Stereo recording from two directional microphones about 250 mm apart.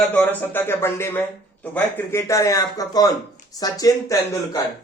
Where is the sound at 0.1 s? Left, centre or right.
Centre.